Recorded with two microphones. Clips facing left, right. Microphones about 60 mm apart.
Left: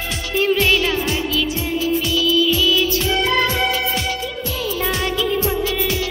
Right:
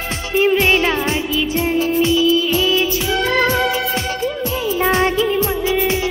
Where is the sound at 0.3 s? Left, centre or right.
Right.